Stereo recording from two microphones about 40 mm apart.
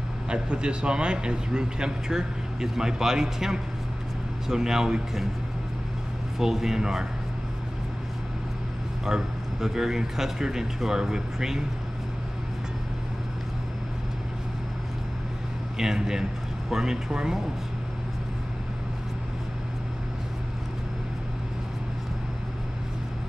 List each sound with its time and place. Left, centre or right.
0.3 s a man's voice: right
6.3 s speech: centre
9.0 s speech: centre
15.8 s speech: centre